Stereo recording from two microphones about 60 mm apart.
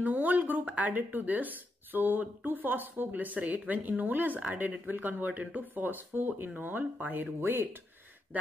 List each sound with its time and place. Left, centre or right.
0.0 s speech: right